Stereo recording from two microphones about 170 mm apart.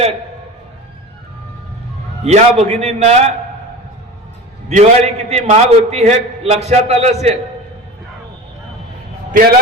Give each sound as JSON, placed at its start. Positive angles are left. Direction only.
{"t": 2.2, "sound": "a man's voice", "side_deg": -40}
{"t": 4.7, "sound": "a man's voice", "side_deg": -40}